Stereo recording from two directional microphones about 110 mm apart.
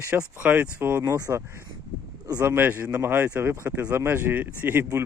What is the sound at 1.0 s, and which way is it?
Speech, 35° right (ahead or behind).